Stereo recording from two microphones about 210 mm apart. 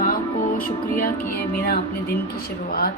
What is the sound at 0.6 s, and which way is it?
Speech, 45° left (ahead or behind).